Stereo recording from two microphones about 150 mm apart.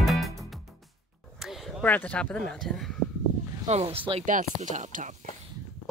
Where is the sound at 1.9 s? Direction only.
10° left (ahead or behind).